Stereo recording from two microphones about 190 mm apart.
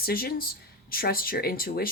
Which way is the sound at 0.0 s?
50° left (ahead or behind).